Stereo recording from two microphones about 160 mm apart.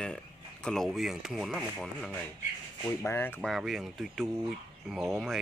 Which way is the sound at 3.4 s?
Centre (ahead or behind).